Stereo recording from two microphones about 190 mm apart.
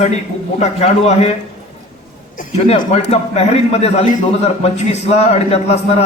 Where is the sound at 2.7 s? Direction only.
35° left (ahead or behind).